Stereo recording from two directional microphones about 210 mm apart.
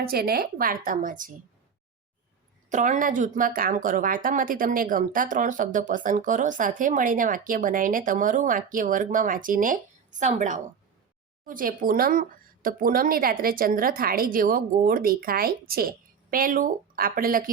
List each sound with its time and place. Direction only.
0.0 s a woman's voice: 45° right (ahead or behind)
2.6 s a woman's voice: 35° right (ahead or behind)